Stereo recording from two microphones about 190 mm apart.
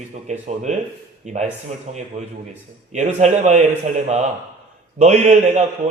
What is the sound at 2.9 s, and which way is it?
A man's voice, 35° right (ahead or behind).